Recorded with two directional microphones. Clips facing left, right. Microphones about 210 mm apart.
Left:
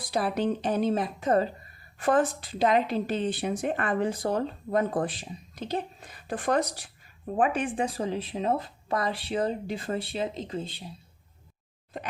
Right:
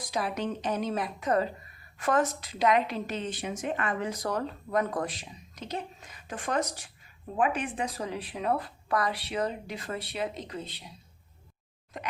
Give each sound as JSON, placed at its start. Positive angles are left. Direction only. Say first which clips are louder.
{"t": 0.1, "sound": "speech", "louder": "left 5 dB", "side_deg": 35}